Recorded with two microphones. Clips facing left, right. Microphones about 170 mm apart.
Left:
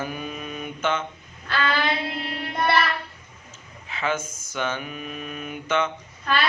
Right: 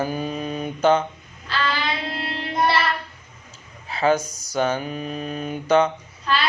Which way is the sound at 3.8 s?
35° right (ahead or behind).